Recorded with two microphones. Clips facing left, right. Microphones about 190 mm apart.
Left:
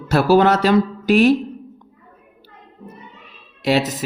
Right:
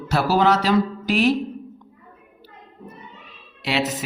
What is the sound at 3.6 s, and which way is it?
Speech, 40° left (ahead or behind).